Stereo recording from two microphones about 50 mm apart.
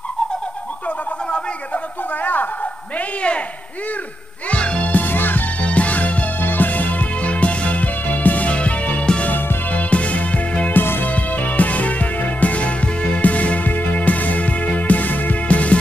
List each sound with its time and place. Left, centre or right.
0.8 s a sound: left
3.2 s a man's voice: left
4.5 s music: left
5.6 s music: left
10.7 s music: left